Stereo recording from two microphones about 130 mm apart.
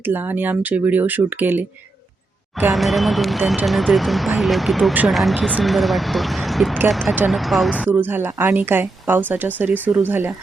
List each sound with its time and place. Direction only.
0.0 s speech: 15° right (ahead or behind)
2.7 s speech: centre (ahead or behind)
7.9 s speech: 15° right (ahead or behind)